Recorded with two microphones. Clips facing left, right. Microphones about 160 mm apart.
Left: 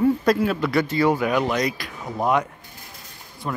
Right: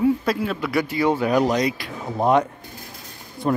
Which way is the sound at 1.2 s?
35° right (ahead or behind).